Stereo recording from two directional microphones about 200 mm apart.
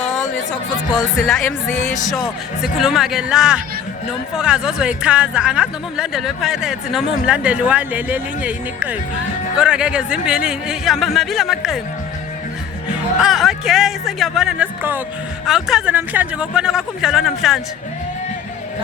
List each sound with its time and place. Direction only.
1.7 s speech: 35° left (ahead or behind)
2.6 s speech: centre (ahead or behind)
13.1 s speech: centre (ahead or behind)